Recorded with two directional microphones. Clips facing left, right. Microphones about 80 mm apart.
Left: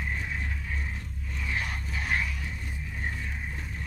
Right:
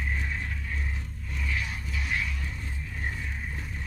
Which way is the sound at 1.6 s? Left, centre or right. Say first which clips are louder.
Left 1 dB; left.